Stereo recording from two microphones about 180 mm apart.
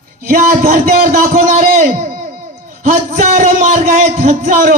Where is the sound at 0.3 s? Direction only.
50° right (ahead or behind).